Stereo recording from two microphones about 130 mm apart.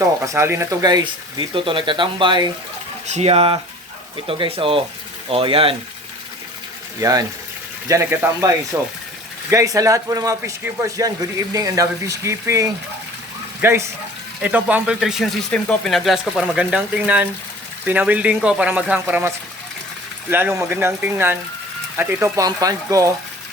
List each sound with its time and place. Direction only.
0.3 s speech: 20° right (ahead or behind); by 2.5 s 35° right (ahead or behind)
3.1 s speech: 55° right (ahead or behind)
7.0 s speech: 30° right (ahead or behind)
20.3 s speech: 20° right (ahead or behind)